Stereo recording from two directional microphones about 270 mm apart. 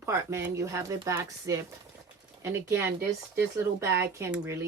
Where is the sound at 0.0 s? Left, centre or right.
Centre.